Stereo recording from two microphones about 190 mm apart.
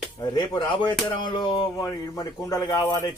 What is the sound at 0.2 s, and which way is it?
A man's voice, 20° left (ahead or behind).